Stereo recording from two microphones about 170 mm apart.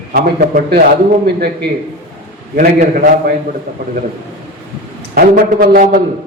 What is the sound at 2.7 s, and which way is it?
Speech, 55° right (ahead or behind).